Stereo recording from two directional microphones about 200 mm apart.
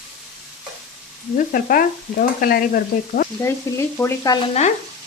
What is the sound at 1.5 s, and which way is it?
Stir, 45° left (ahead or behind).